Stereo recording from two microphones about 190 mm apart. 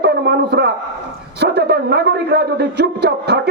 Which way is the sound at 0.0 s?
60° right (ahead or behind).